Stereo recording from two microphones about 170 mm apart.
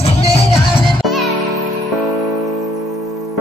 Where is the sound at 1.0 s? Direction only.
Centre (ahead or behind).